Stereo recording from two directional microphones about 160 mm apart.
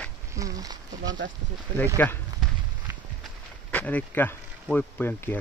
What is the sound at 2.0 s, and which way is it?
Speech, 10° left (ahead or behind).